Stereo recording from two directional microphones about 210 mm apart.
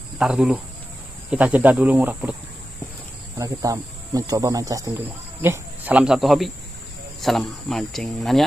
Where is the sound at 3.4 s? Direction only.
15° right (ahead or behind); by 8.4 s centre (ahead or behind).